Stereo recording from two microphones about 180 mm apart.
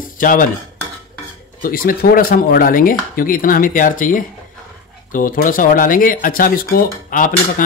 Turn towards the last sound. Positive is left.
turn(degrees=50)  # may be behind; listen again after turning